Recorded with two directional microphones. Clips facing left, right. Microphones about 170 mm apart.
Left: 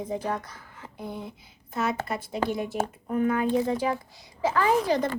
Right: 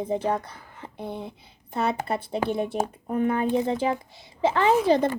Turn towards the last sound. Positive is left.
turn(degrees=-25)  # may be behind; listen again after turning